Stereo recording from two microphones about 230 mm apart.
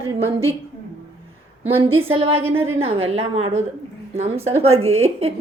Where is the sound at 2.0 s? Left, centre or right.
Right.